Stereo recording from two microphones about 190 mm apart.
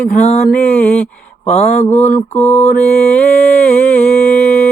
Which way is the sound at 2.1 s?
10° left (ahead or behind).